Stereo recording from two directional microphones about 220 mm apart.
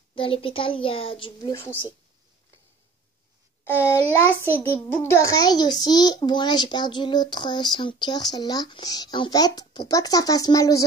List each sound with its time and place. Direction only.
0.1 s speech: 25° left (ahead or behind)
3.6 s a child's voice: 10° left (ahead or behind)